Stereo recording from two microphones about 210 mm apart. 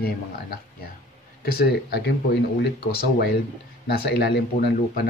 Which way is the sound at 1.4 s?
50° left (ahead or behind).